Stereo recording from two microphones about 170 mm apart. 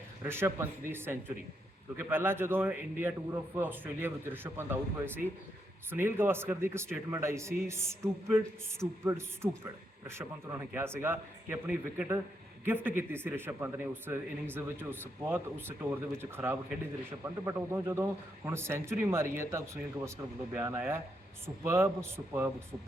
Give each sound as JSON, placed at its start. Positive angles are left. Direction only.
{"t": 0.2, "sound": "a man's voice", "side_deg": -15}